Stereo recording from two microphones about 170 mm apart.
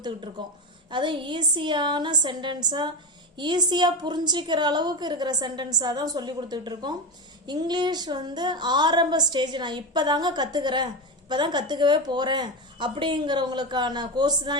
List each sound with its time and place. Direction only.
0.0 s a woman's voice: 30° right (ahead or behind)